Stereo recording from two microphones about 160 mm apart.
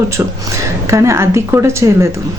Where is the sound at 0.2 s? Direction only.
15° right (ahead or behind).